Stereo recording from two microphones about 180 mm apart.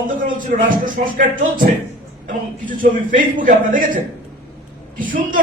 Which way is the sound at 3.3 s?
50° right (ahead or behind).